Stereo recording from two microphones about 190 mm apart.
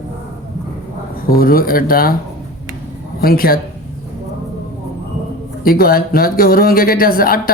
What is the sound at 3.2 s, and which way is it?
Speech, 50° left (ahead or behind).